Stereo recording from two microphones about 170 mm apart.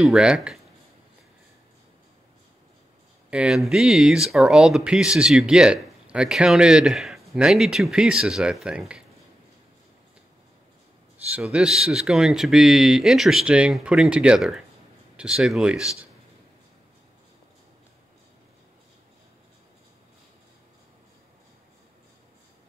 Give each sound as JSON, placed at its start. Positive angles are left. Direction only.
{"t": 0.0, "sound": "speech", "side_deg": -5}
{"t": 3.3, "sound": "speech", "side_deg": -5}
{"t": 11.3, "sound": "speech", "side_deg": -5}